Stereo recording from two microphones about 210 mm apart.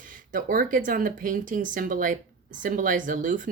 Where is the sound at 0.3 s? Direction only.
40° right (ahead or behind).